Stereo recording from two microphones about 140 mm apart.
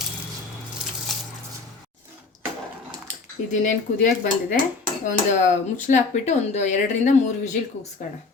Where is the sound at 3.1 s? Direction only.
60° left (ahead or behind).